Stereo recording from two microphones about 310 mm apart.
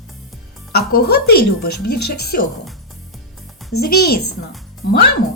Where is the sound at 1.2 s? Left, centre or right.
Left.